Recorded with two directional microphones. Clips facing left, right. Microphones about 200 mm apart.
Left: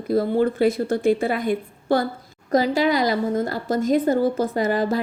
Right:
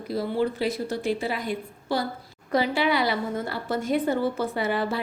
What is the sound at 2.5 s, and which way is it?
A woman's voice, 40° left (ahead or behind).